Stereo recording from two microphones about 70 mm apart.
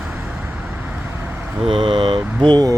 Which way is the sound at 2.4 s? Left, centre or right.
Right.